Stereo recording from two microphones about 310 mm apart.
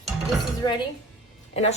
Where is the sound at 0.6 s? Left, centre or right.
Centre.